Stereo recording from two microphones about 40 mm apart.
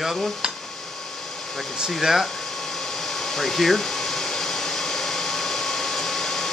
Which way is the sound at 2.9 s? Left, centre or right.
Centre.